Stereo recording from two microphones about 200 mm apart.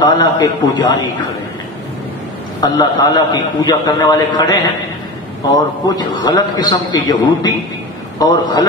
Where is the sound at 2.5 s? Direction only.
20° left (ahead or behind).